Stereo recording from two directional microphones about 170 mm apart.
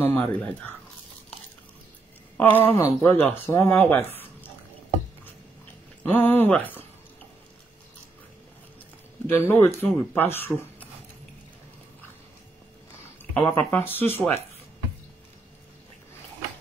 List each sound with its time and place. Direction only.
0.0 s speech: 10° left (ahead or behind)
2.3 s speech: 10° left (ahead or behind)
6.1 s speech: 10° left (ahead or behind)
9.3 s speech: 15° left (ahead or behind)
13.3 s speech: 10° left (ahead or behind)